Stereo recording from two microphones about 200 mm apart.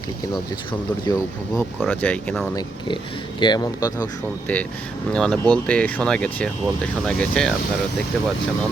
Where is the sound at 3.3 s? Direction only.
20° left (ahead or behind).